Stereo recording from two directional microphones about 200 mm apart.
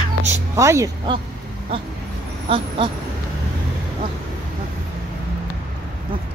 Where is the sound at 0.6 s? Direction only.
15° right (ahead or behind).